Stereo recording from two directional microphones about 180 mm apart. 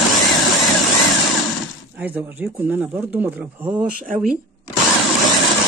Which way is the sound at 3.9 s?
45° right (ahead or behind).